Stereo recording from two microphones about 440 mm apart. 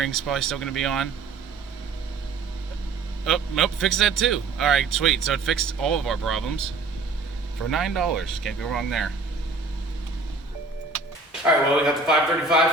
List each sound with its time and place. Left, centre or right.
0.0 s a man's voice: centre
3.2 s a man's voice: centre
7.7 s a man's voice: centre
11.4 s a man's voice: centre